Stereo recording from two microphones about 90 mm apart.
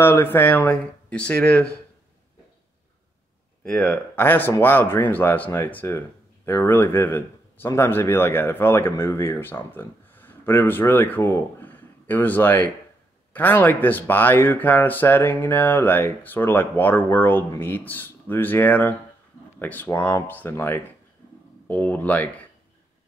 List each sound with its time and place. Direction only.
0.0 s speech: 25° left (ahead or behind)
3.6 s speech: 10° left (ahead or behind)
3.9 s speech: 20° left (ahead or behind)